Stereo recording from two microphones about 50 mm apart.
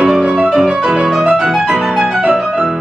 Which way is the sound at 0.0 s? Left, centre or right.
Centre.